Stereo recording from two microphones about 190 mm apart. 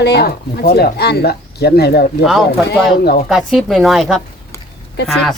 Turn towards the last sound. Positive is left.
turn(degrees=0)  # may be behind; listen again after turning